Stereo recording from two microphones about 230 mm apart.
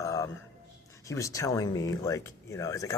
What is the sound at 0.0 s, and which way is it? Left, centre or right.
Music, centre.